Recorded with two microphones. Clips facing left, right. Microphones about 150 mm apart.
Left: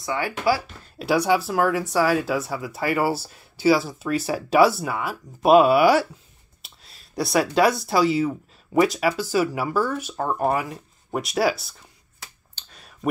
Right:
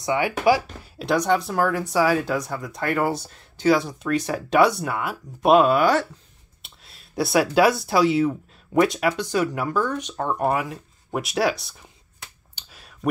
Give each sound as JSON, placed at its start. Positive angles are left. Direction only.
{"t": 0.0, "sound": "speech", "side_deg": -20}
{"t": 0.9, "sound": "speech", "side_deg": 5}
{"t": 12.5, "sound": "a sound", "side_deg": -5}